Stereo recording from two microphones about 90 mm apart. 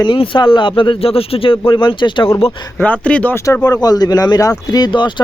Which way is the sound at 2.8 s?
15° left (ahead or behind).